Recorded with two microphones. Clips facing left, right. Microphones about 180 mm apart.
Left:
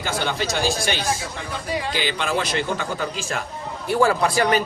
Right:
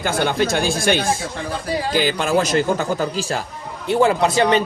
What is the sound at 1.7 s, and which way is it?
Speech, 40° right (ahead or behind).